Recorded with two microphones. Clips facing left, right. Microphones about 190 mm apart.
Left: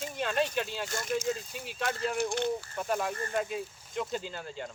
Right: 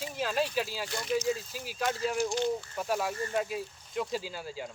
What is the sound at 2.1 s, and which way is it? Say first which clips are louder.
Speech: right 1 dB; 55° left (ahead or behind).